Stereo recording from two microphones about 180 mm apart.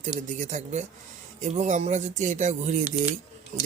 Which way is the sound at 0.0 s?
45° right (ahead or behind).